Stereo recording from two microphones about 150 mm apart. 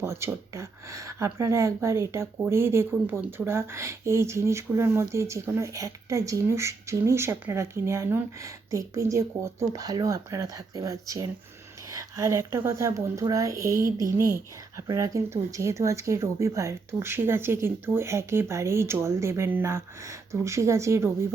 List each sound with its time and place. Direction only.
0.0 s speech: 15° right (ahead or behind)